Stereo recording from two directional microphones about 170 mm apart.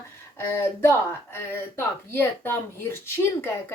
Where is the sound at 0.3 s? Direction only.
15° left (ahead or behind).